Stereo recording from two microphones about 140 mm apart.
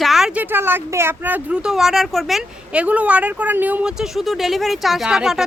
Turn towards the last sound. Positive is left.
turn(degrees=-5)  # may be behind; listen again after turning